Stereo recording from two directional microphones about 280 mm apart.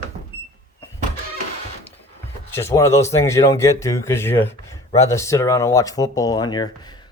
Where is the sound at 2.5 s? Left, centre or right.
Centre.